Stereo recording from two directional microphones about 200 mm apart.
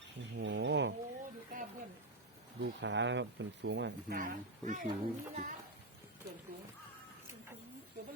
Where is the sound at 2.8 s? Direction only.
65° right (ahead or behind).